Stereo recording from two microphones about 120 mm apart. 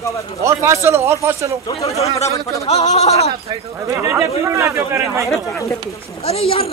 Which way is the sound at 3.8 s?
25° right (ahead or behind).